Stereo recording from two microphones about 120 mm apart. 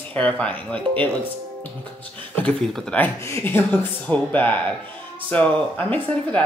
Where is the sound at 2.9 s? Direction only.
20° left (ahead or behind).